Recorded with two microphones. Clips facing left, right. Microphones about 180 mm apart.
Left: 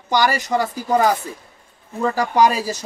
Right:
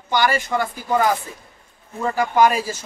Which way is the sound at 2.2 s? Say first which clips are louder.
Right 1 dB; 35° left (ahead or behind).